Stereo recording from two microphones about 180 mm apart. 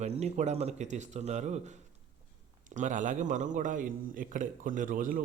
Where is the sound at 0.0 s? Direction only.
40° right (ahead or behind).